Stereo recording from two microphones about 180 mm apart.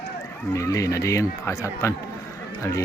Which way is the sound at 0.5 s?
15° left (ahead or behind).